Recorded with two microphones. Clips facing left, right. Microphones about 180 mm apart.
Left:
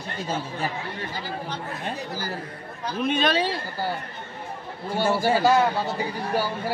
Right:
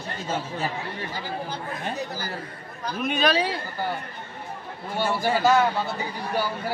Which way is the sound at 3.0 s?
5° right (ahead or behind).